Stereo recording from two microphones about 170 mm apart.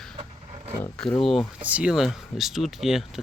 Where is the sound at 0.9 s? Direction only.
5° left (ahead or behind).